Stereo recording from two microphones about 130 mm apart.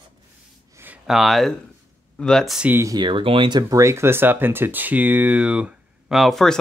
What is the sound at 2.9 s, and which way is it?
Speech, 40° right (ahead or behind).